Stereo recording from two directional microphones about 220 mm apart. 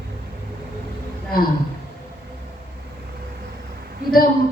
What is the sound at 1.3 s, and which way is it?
Speech, 40° left (ahead or behind).